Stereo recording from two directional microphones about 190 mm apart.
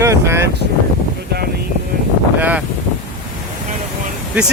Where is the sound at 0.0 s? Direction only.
15° right (ahead or behind).